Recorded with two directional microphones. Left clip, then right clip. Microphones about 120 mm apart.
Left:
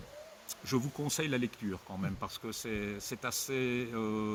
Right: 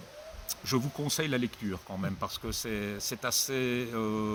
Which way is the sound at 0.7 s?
20° right (ahead or behind).